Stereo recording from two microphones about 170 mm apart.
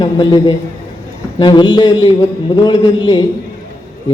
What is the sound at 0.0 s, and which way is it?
A man's voice, 25° left (ahead or behind).